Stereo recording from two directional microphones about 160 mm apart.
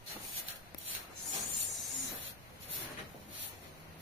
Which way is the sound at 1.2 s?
Centre (ahead or behind).